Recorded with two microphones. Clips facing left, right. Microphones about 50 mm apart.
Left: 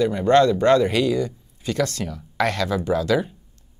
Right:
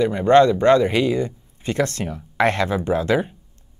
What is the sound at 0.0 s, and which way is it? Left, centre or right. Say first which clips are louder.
Speech: right 2 dB; right.